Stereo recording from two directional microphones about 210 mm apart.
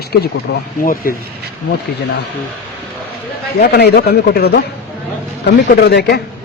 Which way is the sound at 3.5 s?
50° left (ahead or behind).